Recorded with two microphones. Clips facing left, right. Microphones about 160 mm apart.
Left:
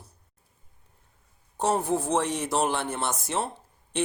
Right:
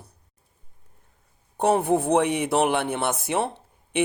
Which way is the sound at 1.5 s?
60° right (ahead or behind).